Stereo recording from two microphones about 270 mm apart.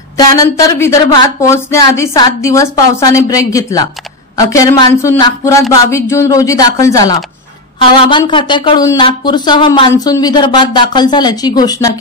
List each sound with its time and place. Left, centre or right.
0.2 s speech: centre